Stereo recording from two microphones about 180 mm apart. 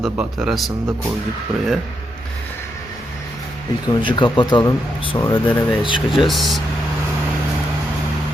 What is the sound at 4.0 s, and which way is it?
Speech, 25° left (ahead or behind).